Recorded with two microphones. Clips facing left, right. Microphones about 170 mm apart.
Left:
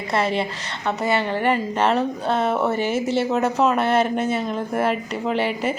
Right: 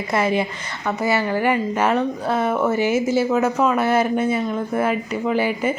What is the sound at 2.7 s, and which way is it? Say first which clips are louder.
Speech: right 3 dB; 10° right (ahead or behind).